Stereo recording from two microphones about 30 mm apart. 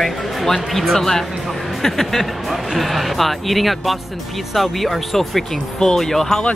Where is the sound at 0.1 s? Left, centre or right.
Centre.